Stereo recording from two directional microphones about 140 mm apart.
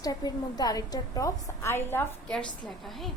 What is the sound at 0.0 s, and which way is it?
A woman's voice, 25° left (ahead or behind).